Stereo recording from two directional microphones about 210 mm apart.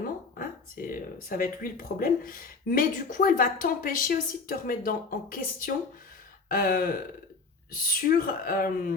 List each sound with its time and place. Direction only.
0.3 s speech: 40° left (ahead or behind)